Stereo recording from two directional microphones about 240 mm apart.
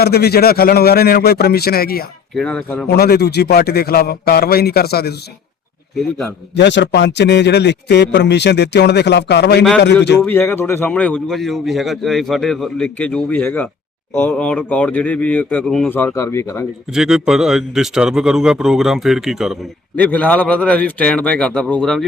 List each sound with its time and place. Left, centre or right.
0.0 s a man's voice: left
2.3 s a man's voice: centre
2.9 s a man's voice: left
6.6 s a man's voice: left
10.2 s a man's voice: centre
16.9 s a man's voice: centre